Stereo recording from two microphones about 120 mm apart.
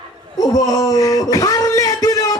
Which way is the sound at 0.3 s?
30° left (ahead or behind).